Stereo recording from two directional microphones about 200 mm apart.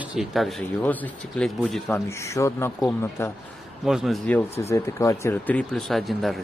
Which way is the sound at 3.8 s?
Centre (ahead or behind).